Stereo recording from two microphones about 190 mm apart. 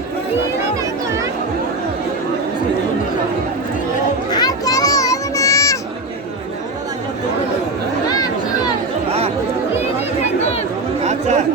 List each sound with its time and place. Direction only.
4.3 s children playing: 20° left (ahead or behind)
9.0 s chatter: 30° right (ahead or behind)
11.0 s chatter: 35° right (ahead or behind)